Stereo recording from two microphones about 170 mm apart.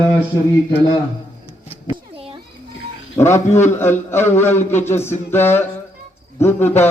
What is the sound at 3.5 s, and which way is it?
Speech, 45° left (ahead or behind).